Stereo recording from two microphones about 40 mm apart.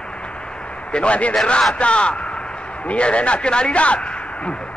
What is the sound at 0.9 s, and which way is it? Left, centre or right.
A man's voice, left.